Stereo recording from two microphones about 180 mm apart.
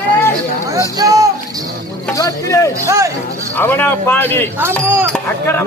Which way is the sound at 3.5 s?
10° left (ahead or behind).